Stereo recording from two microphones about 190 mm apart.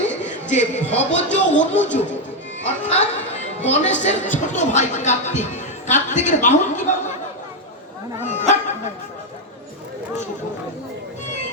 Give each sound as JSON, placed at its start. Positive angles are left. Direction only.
{"t": 0.7, "sound": "a man's voice", "side_deg": 10}
{"t": 1.1, "sound": "speech", "side_deg": 70}
{"t": 2.8, "sound": "a woman's voice", "side_deg": 35}
{"t": 8.2, "sound": "speech", "side_deg": 40}